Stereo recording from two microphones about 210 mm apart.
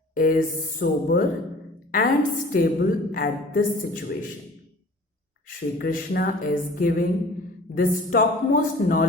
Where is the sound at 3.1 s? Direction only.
40° left (ahead or behind).